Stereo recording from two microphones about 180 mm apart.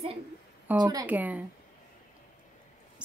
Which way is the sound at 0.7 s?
20° right (ahead or behind).